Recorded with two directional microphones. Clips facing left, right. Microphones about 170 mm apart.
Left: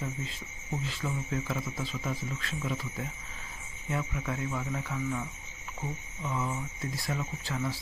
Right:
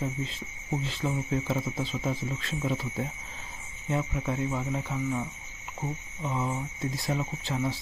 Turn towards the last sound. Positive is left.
turn(degrees=-25)  # may be behind; listen again after turning